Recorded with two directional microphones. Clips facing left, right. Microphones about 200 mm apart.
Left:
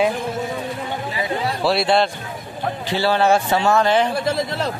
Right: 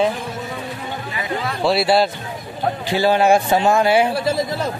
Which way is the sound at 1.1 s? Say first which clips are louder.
Left 1 dB; 30° left (ahead or behind).